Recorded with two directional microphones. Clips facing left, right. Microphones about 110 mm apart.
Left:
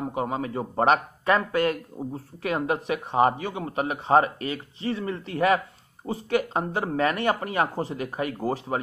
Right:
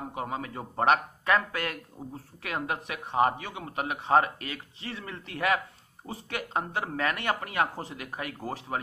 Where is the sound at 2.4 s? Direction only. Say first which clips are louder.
Left 7 dB; 10° left (ahead or behind).